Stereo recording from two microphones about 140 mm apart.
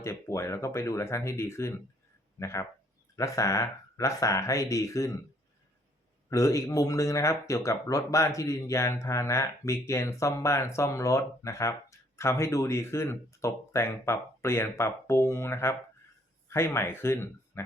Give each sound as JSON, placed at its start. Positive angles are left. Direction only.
{"t": 0.0, "sound": "speech", "side_deg": 20}
{"t": 6.3, "sound": "speech", "side_deg": 20}